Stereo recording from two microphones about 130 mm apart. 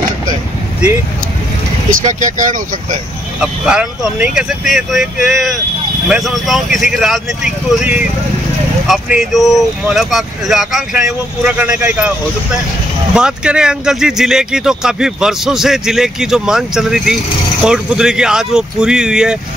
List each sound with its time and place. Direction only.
2.0 s speech: 75° right (ahead or behind)
3.3 s speech: 5° right (ahead or behind)
8.8 s speech: 5° right (ahead or behind)
13.1 s speech: 5° right (ahead or behind)